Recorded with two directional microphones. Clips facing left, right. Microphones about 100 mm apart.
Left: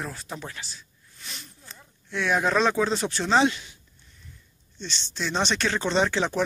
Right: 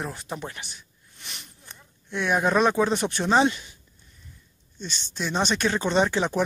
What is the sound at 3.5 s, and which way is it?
Speech, centre (ahead or behind).